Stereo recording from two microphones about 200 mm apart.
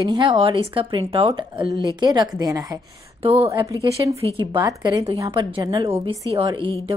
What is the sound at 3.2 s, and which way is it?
A woman's voice, 30° right (ahead or behind).